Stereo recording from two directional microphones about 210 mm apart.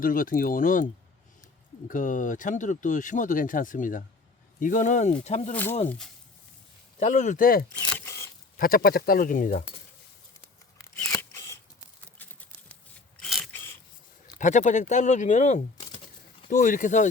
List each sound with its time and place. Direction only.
0.0 s speech: 40° left (ahead or behind)
1.9 s speech: 40° left (ahead or behind)
7.0 s speech: 35° left (ahead or behind)
7.9 s a sound: 15° left (ahead or behind)
8.5 s speech: 45° left (ahead or behind)
10.9 s scissors: 5° left (ahead or behind)
13.2 s a sound: centre (ahead or behind)
14.3 s speech: 35° left (ahead or behind)